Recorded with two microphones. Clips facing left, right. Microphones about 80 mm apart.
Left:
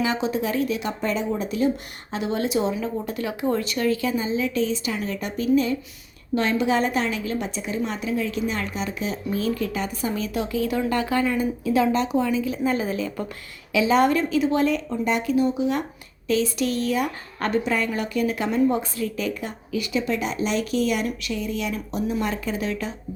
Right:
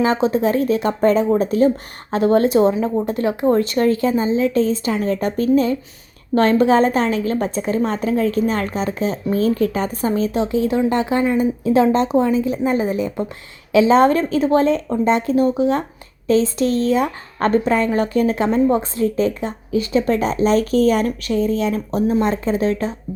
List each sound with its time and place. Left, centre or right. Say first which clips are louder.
0.0 s a woman's voice: right 7 dB; right